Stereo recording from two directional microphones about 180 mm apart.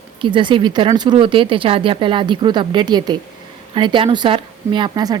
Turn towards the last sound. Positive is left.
turn(degrees=-25)  # may be behind; listen again after turning